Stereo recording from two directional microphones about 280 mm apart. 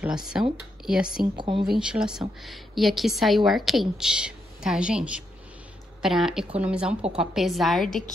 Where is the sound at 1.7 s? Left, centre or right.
Centre.